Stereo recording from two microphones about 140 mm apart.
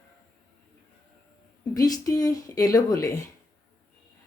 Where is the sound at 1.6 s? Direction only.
25° left (ahead or behind).